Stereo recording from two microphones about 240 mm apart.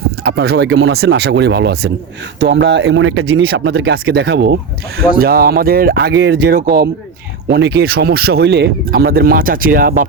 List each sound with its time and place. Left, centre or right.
0.3 s speech: right